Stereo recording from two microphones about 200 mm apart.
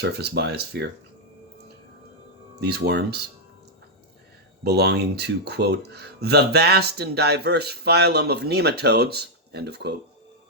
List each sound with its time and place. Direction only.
0.0 s speech: 55° right (ahead or behind)
2.6 s speech: 55° right (ahead or behind)
4.6 s speech: 55° right (ahead or behind)